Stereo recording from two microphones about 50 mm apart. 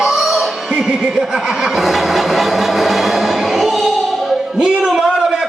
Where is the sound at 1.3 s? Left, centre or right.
Centre.